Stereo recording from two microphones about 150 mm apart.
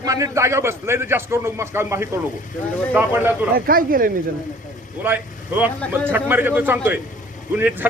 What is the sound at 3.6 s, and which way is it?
Speech, 75° right (ahead or behind).